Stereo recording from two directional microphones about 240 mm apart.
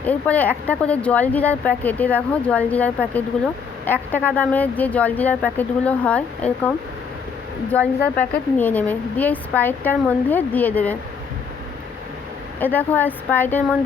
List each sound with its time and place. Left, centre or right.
0.0 s speech: centre
12.5 s speech: centre